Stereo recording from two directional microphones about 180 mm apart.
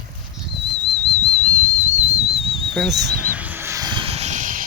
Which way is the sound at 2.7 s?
Centre (ahead or behind).